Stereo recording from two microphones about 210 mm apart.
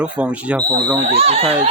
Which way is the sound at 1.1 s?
30° right (ahead or behind).